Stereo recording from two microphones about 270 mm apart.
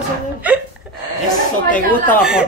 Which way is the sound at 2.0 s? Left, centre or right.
Centre.